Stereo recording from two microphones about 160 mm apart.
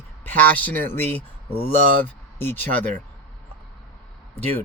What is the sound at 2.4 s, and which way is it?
Speech, 15° left (ahead or behind).